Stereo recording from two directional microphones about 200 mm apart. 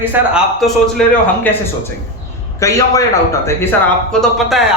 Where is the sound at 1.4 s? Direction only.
10° left (ahead or behind).